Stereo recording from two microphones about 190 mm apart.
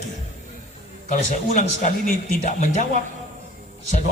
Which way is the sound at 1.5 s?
40° left (ahead or behind).